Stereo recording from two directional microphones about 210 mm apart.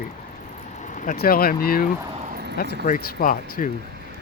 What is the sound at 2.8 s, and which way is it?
Speech, 40° left (ahead or behind).